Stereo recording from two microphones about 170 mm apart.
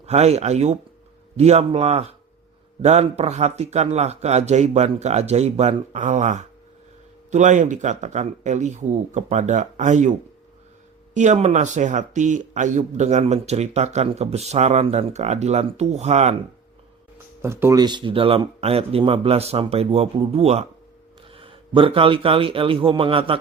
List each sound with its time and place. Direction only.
0.0 s speech: 40° right (ahead or behind)
17.4 s a man's voice: 15° right (ahead or behind); by 23.4 s 30° right (ahead or behind)